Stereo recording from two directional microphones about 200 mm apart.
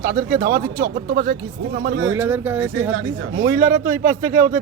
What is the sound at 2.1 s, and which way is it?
Speech, 10° right (ahead or behind).